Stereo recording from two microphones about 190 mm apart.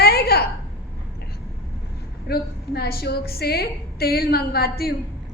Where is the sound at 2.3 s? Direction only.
55° left (ahead or behind).